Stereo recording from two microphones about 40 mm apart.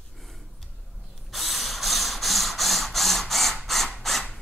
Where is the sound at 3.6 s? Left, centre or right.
Centre.